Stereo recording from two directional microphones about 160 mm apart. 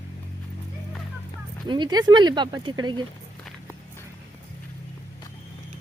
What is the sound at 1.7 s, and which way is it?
Speech, 25° right (ahead or behind).